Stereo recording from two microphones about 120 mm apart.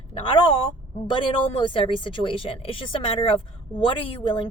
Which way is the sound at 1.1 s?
45° left (ahead or behind).